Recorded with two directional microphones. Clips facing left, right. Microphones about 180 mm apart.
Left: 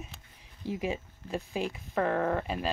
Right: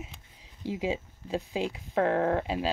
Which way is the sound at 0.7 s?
15° right (ahead or behind).